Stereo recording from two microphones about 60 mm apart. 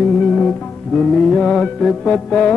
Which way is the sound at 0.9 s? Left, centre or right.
Centre.